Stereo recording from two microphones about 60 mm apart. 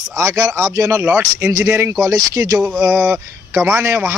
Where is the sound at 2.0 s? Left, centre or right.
Right.